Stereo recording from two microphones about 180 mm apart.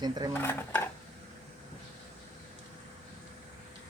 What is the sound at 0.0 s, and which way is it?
Speech, 25° right (ahead or behind).